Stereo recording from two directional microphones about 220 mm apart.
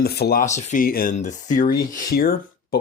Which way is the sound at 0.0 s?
45° left (ahead or behind).